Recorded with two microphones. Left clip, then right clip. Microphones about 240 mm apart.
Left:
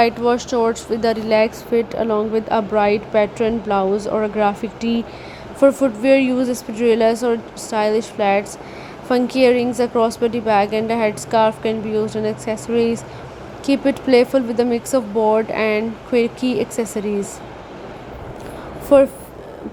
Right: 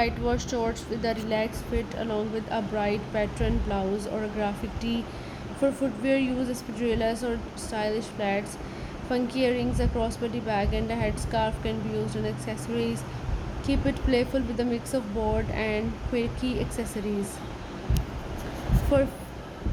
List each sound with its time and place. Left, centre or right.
0.0 s speech: centre
18.9 s speech: left